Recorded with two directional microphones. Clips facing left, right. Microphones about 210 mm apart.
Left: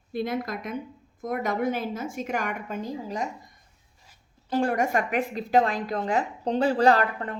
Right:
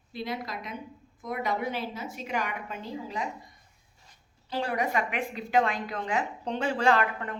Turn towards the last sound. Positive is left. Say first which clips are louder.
# left 4 dB
turn(degrees=35)  # may be behind; listen again after turning